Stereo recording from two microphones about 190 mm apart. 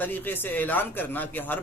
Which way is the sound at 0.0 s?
10° left (ahead or behind).